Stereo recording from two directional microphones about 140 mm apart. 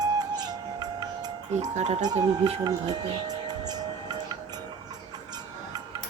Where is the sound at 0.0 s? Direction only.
30° right (ahead or behind).